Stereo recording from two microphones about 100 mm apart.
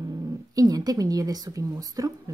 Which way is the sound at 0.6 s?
40° right (ahead or behind).